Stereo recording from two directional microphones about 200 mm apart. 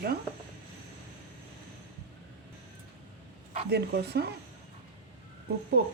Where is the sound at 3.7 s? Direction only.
55° right (ahead or behind).